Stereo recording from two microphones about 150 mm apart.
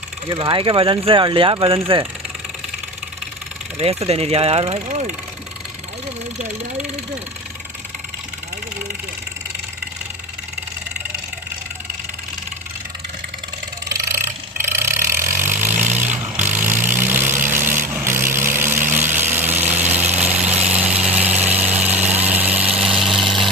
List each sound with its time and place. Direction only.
0.3 s speech: 35° right (ahead or behind)
3.8 s speech: 40° right (ahead or behind)
6.4 s speech: 50° right (ahead or behind)
13.8 s vehicle: 20° right (ahead or behind)
22.3 s a sound: 10° right (ahead or behind)